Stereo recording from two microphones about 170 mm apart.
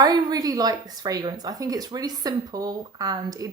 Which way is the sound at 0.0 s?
25° right (ahead or behind).